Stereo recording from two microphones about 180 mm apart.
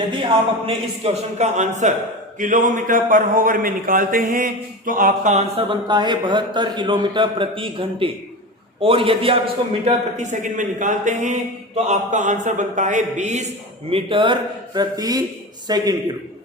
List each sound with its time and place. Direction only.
0.1 s speech: 25° right (ahead or behind); by 5.4 s 45° right (ahead or behind)
5.5 s a man's voice: 25° right (ahead or behind)
9.8 s speech: 40° right (ahead or behind)
13.9 s a man's voice: 30° right (ahead or behind)